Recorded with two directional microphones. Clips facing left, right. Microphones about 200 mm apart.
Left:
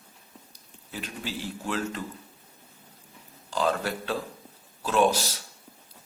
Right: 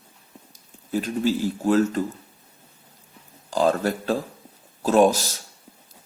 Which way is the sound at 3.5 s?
45° right (ahead or behind).